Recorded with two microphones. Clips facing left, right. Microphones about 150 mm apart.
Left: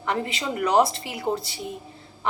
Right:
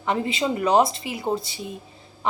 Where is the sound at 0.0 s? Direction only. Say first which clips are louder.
Right 3 dB; 20° right (ahead or behind).